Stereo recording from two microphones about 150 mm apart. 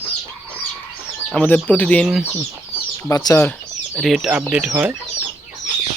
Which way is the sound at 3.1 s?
20° left (ahead or behind).